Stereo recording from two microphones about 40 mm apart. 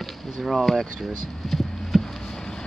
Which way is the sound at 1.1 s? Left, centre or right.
Centre.